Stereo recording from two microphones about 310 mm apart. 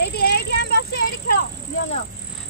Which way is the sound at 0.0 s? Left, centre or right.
Left.